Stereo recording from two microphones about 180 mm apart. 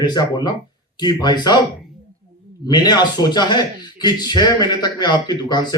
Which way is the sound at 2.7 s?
25° left (ahead or behind).